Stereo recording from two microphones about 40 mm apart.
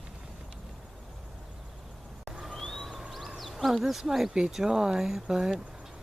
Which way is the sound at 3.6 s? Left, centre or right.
Centre.